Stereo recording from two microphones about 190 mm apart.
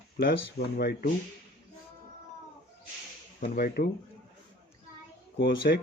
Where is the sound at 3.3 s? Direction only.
45° left (ahead or behind).